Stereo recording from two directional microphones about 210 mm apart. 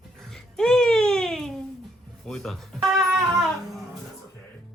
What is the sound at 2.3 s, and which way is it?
Speech, centre (ahead or behind).